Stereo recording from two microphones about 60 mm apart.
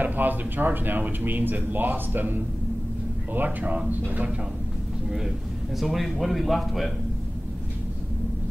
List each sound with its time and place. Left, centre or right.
0.0 s speech: right
5.8 s a man's voice: centre